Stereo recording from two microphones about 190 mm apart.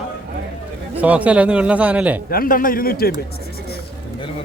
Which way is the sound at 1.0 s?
5° right (ahead or behind).